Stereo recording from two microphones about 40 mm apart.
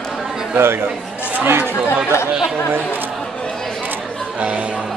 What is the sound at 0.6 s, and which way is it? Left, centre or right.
Speech, right.